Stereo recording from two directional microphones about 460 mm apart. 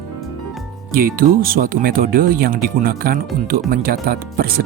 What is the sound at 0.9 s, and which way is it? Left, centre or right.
Speech, centre.